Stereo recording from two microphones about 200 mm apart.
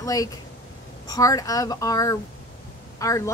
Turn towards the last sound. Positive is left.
turn(degrees=15)  # may be behind; listen again after turning